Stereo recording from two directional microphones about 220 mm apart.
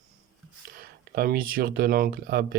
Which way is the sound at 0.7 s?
40° right (ahead or behind).